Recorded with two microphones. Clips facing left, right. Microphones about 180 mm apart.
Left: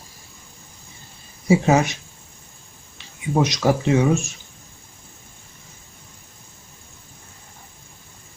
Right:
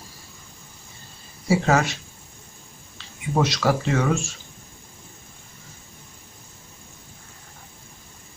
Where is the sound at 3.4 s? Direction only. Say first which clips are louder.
Left 2 dB; 20° left (ahead or behind).